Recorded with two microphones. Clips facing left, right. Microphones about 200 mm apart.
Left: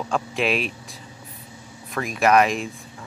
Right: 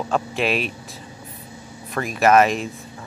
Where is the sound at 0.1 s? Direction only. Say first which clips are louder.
Right 1 dB; centre (ahead or behind).